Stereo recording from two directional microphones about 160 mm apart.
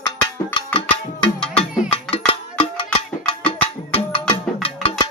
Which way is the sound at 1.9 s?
35° left (ahead or behind).